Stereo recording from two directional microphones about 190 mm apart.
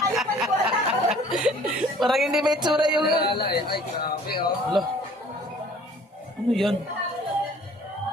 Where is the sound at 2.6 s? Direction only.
20° right (ahead or behind).